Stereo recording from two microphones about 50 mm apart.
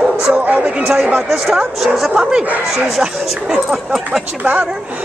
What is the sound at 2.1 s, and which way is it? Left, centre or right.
Speech, centre.